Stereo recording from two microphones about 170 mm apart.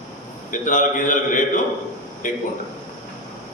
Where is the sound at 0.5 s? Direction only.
50° left (ahead or behind).